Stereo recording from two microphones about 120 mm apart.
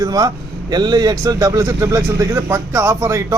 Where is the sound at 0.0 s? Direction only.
30° right (ahead or behind).